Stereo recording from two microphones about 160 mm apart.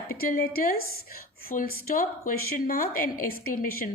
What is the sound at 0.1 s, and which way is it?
A woman's voice, 65° left (ahead or behind).